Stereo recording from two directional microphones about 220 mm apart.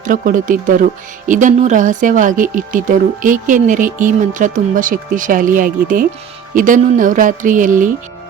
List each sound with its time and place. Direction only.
0.0 s speech: 35° right (ahead or behind)